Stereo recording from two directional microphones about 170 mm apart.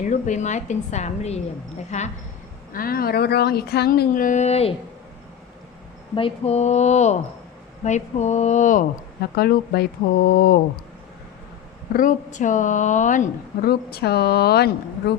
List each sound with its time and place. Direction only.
0.0 s a woman's voice: 45° left (ahead or behind)
2.7 s speech: 60° left (ahead or behind); by 4.7 s 40° left (ahead or behind)
6.1 s a woman's voice: 35° left (ahead or behind)
9.3 s speech: 65° left (ahead or behind)
11.9 s a woman's voice: 50° left (ahead or behind)
13.7 s a woman's voice: 70° left (ahead or behind)